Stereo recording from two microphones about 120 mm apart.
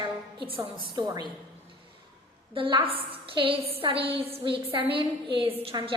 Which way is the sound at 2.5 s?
45° right (ahead or behind).